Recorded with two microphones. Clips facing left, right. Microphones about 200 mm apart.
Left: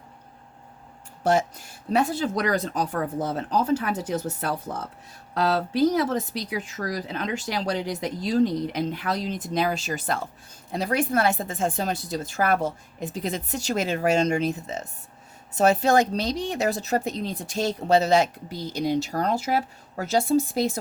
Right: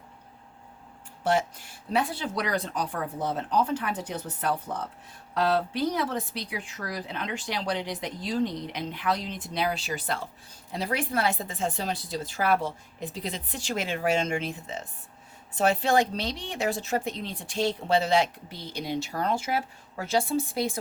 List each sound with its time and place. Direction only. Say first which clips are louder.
1.2 s a woman's voice: left 3 dB; 40° left (ahead or behind)